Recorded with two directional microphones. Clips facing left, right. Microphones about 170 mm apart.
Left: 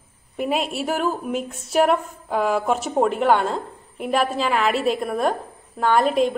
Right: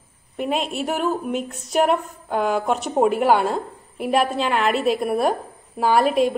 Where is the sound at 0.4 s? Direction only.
5° left (ahead or behind).